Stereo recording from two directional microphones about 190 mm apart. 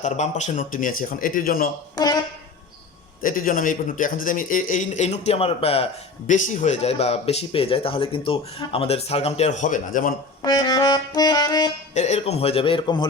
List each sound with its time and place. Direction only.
0.0 s a man's voice: 40° left (ahead or behind)
3.2 s a man's voice: 45° left (ahead or behind)
10.4 s music: 20° left (ahead or behind)
11.9 s a man's voice: 35° left (ahead or behind)